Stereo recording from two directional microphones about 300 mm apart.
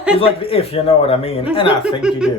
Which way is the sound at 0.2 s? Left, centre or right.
Centre.